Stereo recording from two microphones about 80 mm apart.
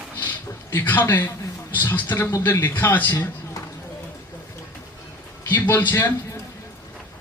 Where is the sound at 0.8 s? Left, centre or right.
Left.